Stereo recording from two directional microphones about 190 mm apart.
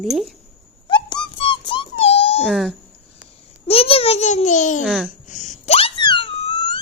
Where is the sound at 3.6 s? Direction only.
30° left (ahead or behind).